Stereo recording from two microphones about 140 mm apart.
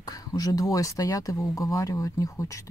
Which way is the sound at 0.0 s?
25° left (ahead or behind).